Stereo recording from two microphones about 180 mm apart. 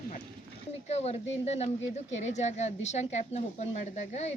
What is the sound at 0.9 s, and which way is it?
Speech, 35° left (ahead or behind).